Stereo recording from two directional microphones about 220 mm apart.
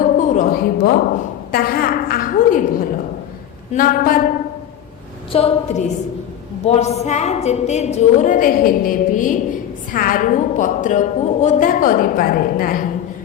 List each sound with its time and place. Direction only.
0.0 s a sound: 35° left (ahead or behind)
1.5 s a woman's voice: 40° left (ahead or behind)
5.3 s a woman's voice: 25° left (ahead or behind)